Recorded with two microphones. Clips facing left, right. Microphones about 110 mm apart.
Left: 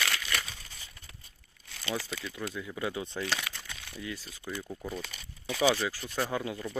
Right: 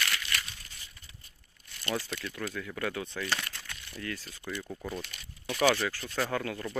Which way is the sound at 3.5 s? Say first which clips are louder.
Left 3 dB; 90° left.